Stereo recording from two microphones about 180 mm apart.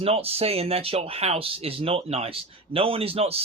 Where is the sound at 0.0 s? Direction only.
35° right (ahead or behind).